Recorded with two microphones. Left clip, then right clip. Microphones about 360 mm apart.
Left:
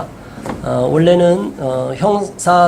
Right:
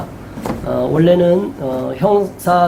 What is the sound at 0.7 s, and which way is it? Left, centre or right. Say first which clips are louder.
Speech: left 1 dB; left.